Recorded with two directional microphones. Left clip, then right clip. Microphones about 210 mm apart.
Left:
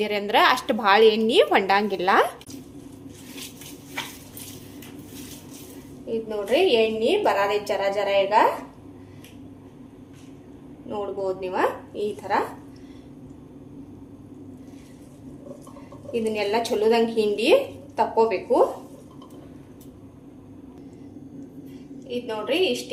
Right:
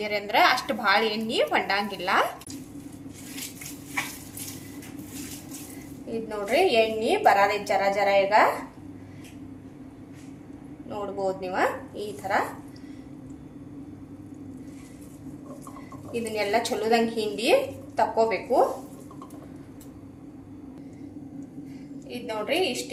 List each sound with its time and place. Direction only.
0.0 s a woman's voice: 35° left (ahead or behind)
6.1 s a woman's voice: 20° left (ahead or behind)
10.8 s a woman's voice: 30° left (ahead or behind)
16.3 s a woman's voice: 30° left (ahead or behind)
22.1 s a woman's voice: 20° left (ahead or behind)